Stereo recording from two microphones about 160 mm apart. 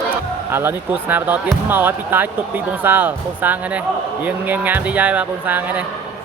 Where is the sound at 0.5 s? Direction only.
15° right (ahead or behind).